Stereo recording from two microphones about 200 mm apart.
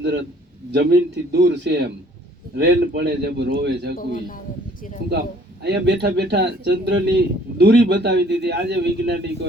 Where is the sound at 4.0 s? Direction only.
45° left (ahead or behind).